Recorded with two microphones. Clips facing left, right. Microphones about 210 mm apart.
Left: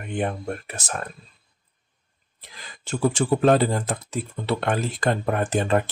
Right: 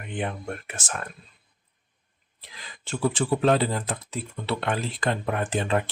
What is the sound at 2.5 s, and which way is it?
Speech, 45° left (ahead or behind).